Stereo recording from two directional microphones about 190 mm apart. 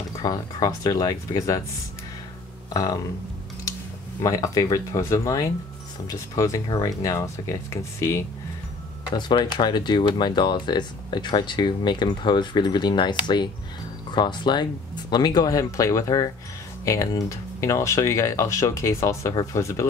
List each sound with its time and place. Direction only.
0.2 s speech: 20° left (ahead or behind)
2.7 s speech: 20° left (ahead or behind)
4.2 s speech: 20° left (ahead or behind)